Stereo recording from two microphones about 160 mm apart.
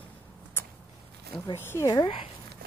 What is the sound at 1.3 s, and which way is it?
Speech, 15° left (ahead or behind).